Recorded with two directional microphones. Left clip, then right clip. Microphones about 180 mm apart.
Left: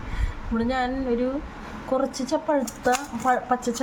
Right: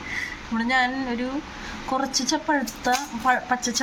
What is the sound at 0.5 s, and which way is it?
Speech, 25° left (ahead or behind).